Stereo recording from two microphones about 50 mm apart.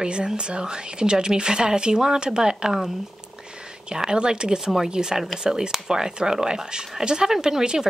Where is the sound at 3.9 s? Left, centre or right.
Centre.